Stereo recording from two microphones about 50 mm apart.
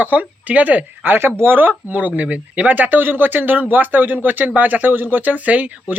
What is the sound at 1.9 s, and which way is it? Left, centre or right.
Speech, right.